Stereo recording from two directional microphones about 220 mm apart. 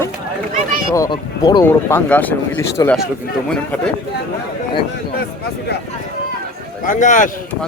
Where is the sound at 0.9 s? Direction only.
15° left (ahead or behind).